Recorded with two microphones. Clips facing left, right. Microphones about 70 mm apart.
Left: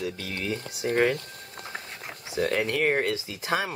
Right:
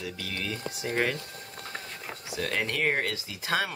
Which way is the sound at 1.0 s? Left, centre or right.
Centre.